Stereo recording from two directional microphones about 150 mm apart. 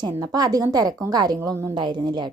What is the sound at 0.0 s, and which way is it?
A woman's voice, 25° right (ahead or behind).